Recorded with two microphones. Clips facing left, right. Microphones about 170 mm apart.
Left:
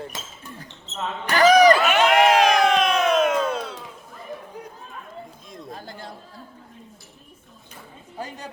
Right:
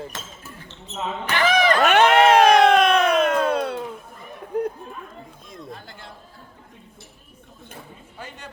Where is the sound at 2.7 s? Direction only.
60° right (ahead or behind).